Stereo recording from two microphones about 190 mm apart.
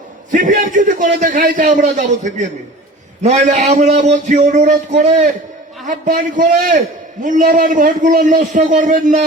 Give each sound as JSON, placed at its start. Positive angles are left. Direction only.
{"t": 0.3, "sound": "a man's voice", "side_deg": -45}